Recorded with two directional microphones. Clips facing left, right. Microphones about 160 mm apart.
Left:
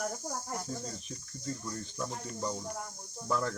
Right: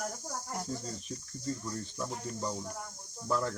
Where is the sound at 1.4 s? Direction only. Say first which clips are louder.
Right 2 dB; 5° right (ahead or behind).